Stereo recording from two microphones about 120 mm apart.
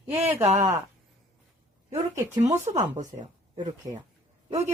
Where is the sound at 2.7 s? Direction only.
85° right.